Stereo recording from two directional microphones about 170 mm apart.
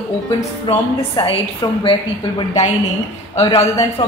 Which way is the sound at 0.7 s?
35° left (ahead or behind).